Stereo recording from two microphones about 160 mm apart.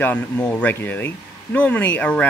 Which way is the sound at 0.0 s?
10° left (ahead or behind).